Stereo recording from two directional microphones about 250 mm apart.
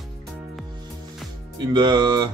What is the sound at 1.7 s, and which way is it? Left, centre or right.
Speech, centre.